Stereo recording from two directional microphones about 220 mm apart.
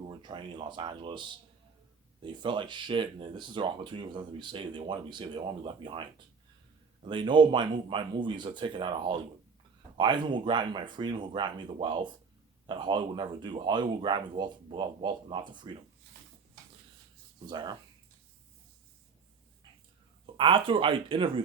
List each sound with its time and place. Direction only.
0.1 s speech: 20° right (ahead or behind)
17.4 s speech: 20° right (ahead or behind)
20.2 s speech: 25° right (ahead or behind)